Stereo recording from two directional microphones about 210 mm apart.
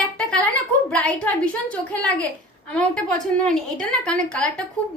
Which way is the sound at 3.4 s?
5° left (ahead or behind).